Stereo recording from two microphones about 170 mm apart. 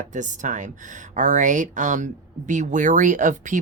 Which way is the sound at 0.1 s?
45° right (ahead or behind).